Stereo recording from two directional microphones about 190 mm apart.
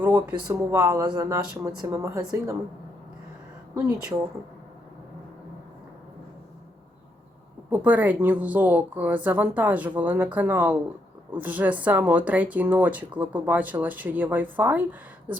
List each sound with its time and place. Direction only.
0.4 s speech: 15° right (ahead or behind)
3.8 s speech: 15° right (ahead or behind)
7.7 s speech: 10° right (ahead or behind)